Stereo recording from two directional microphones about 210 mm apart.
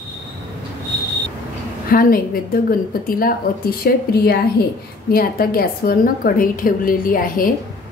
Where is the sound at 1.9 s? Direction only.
45° left (ahead or behind).